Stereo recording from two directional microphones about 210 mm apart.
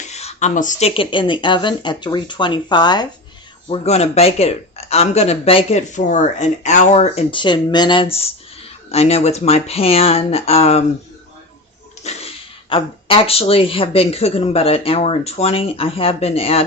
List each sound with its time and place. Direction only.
0.0 s speech: 30° left (ahead or behind)
3.7 s speech: 30° left (ahead or behind)
12.0 s speech: 25° left (ahead or behind)